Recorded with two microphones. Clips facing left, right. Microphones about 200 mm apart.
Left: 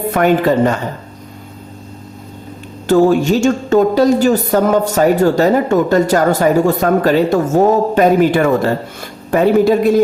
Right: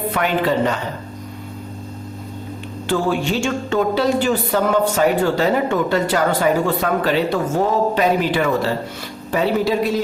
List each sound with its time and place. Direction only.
0.1 s a woman's voice: 45° left (ahead or behind)
2.8 s a woman's voice: 45° left (ahead or behind)